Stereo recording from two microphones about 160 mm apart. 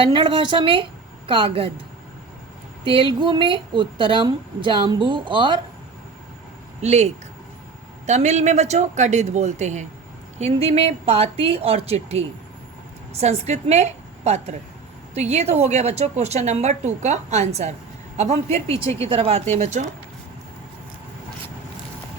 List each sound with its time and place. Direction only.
0.0 s a woman's voice: 35° right (ahead or behind)
2.8 s a woman's voice: 35° right (ahead or behind)
6.8 s a woman's voice: 45° right (ahead or behind)